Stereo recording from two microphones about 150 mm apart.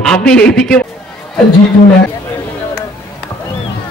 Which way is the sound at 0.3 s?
5° left (ahead or behind).